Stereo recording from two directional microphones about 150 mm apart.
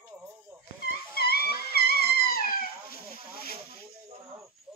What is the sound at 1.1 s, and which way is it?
Dog, 90° left.